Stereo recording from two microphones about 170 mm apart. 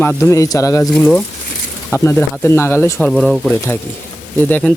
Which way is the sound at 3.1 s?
Centre (ahead or behind).